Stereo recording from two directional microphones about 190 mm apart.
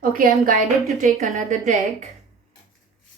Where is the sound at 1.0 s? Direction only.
35° right (ahead or behind).